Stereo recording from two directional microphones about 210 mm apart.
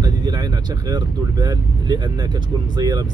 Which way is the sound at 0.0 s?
20° right (ahead or behind).